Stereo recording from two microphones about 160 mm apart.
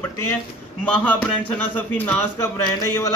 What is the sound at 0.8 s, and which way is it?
A man's voice, 5° left (ahead or behind).